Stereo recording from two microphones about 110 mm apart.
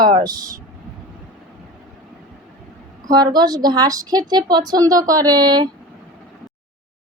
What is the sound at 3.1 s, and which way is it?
A woman's voice, 35° right (ahead or behind).